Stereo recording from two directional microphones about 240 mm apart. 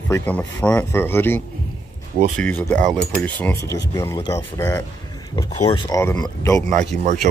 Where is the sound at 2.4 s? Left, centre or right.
Centre.